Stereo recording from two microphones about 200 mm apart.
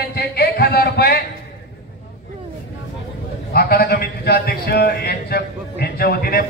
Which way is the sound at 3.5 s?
50° left (ahead or behind).